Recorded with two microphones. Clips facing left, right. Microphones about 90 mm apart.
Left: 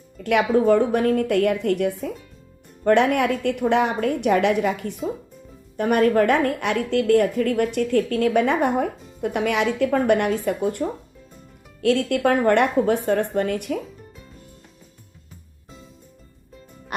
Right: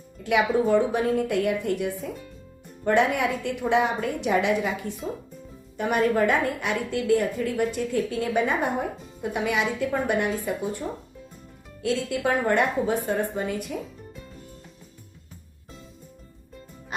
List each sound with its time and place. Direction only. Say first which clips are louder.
0.2 s a woman's voice: left 3 dB; 60° left (ahead or behind)